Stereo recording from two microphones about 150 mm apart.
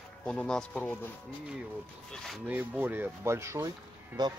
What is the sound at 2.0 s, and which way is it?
Speech, 5° left (ahead or behind).